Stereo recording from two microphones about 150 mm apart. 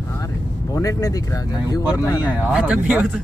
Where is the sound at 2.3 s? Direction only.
10° right (ahead or behind).